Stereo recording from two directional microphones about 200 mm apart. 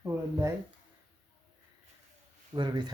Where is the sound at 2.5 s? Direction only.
20° right (ahead or behind).